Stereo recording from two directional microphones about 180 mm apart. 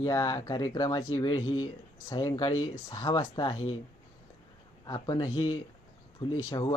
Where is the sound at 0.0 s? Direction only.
20° left (ahead or behind).